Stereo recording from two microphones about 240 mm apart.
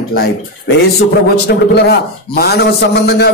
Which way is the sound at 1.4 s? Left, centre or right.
Left.